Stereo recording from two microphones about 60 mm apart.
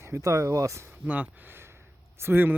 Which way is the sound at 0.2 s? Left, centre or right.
Right.